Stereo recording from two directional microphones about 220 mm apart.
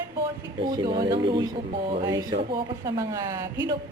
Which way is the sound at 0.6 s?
20° right (ahead or behind).